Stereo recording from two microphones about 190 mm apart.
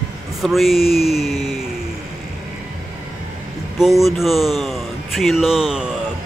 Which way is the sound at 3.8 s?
Centre (ahead or behind).